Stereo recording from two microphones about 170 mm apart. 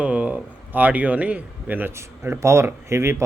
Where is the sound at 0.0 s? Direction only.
10° right (ahead or behind).